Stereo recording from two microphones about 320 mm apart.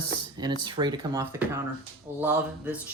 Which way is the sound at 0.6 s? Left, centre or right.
Centre.